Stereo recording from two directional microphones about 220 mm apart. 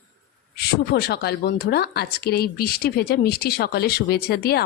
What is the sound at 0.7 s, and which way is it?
A woman's voice, 45° left (ahead or behind).